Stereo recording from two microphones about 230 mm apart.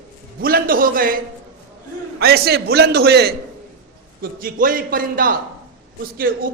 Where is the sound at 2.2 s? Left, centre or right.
Right.